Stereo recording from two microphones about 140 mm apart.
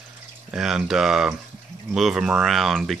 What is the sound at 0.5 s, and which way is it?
Speech, 5° right (ahead or behind).